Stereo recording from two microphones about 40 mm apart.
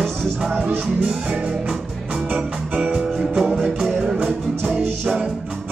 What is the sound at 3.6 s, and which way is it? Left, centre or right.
Music, centre.